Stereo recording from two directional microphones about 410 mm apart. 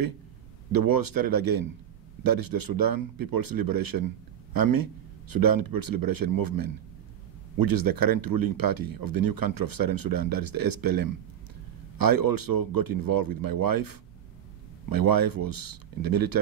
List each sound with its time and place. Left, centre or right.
0.7 s speech: right